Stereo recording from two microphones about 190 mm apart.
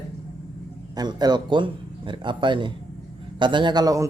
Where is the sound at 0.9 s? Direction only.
20° right (ahead or behind).